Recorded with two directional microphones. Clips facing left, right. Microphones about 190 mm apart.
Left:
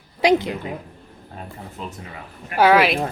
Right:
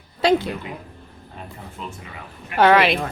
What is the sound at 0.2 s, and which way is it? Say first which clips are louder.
Speech: left 1 dB; 15° left (ahead or behind).